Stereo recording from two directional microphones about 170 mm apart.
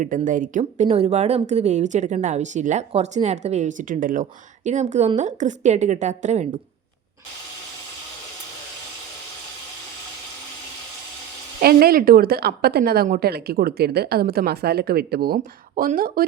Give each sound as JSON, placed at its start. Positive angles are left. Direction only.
{"t": 0.0, "sound": "speech", "side_deg": -50}
{"t": 0.8, "sound": "speech", "side_deg": -40}
{"t": 11.6, "sound": "a woman's voice", "side_deg": -65}
{"t": 15.4, "sound": "a woman's voice", "side_deg": -50}